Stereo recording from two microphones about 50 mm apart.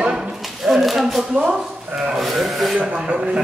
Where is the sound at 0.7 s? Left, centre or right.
Centre.